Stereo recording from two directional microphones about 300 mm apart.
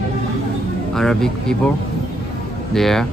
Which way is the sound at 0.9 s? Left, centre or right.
Centre.